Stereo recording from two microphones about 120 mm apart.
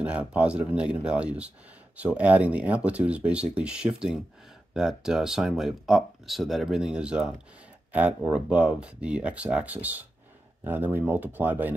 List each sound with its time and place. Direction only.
0.0 s speech: 10° right (ahead or behind)